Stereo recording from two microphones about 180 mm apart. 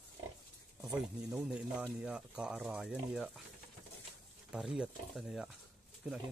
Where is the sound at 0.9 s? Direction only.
5° right (ahead or behind).